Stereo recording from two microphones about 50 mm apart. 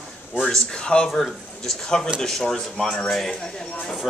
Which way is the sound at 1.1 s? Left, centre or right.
Centre.